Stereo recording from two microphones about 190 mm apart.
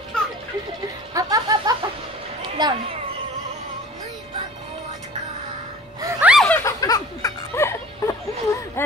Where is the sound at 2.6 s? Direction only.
20° right (ahead or behind).